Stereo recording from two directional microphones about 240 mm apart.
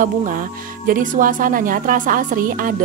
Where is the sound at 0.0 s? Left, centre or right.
Right.